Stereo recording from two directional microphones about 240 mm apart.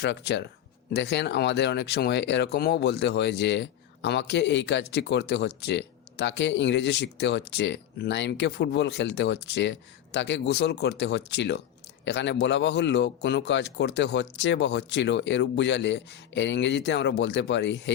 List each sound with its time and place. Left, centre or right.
0.0 s speech: left